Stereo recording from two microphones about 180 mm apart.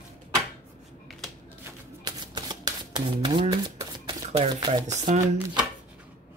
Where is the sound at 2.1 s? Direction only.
20° right (ahead or behind).